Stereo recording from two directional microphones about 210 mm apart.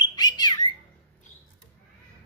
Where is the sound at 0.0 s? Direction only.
20° left (ahead or behind).